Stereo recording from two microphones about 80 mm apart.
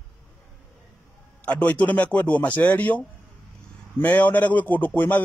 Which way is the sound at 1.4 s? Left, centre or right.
Centre.